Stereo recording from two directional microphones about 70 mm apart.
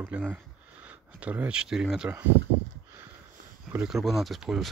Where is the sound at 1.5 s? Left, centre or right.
Centre.